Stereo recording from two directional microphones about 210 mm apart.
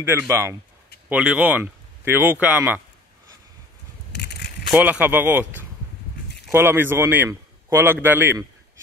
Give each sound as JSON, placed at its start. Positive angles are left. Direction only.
{"t": 0.3, "sound": "a man's voice", "side_deg": -10}
{"t": 4.1, "sound": "a sound", "side_deg": 55}
{"t": 4.7, "sound": "a man's voice", "side_deg": -10}